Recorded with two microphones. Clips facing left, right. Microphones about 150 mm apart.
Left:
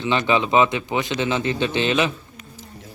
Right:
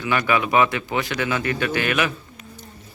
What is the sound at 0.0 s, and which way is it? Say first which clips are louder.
Speech: left 1 dB; 25° left (ahead or behind).